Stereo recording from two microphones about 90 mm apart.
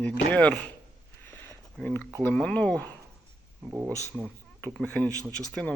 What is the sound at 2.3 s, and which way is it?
Speech, 10° left (ahead or behind).